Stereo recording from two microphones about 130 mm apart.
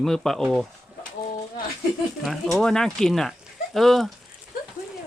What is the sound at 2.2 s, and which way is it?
Speech, 5° left (ahead or behind).